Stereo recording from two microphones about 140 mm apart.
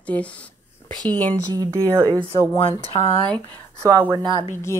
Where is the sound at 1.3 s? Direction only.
25° right (ahead or behind).